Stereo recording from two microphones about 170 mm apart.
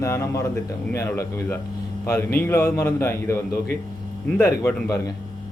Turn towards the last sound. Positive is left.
turn(degrees=15)  # may be behind; listen again after turning